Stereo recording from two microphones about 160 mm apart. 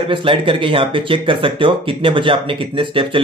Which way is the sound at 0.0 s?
30° right (ahead or behind).